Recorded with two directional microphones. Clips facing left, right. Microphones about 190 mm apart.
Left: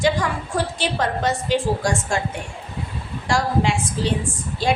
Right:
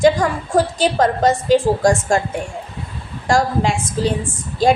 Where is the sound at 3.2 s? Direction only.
45° right (ahead or behind).